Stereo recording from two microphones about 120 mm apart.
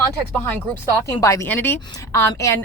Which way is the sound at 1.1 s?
30° left (ahead or behind).